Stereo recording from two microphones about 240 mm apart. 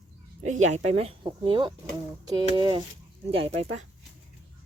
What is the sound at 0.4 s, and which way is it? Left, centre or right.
Speech, right.